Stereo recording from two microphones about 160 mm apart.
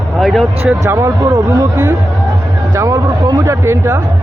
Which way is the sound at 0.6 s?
15° right (ahead or behind).